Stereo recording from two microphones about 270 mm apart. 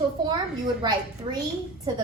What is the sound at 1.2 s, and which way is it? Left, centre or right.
Speech, centre.